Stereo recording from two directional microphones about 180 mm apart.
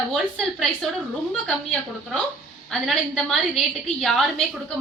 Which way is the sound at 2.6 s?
Centre (ahead or behind).